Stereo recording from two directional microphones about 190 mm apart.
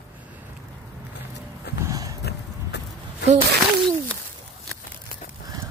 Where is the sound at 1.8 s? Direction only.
20° right (ahead or behind).